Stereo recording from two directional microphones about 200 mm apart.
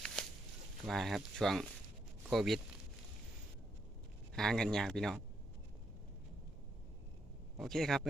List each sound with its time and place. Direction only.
0.2 s a sound: 5° left (ahead or behind)
0.9 s speech: centre (ahead or behind)
4.4 s speech: 5° left (ahead or behind)
7.6 s speech: centre (ahead or behind)